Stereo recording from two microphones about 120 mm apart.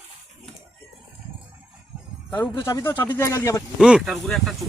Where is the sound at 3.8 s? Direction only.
5° right (ahead or behind).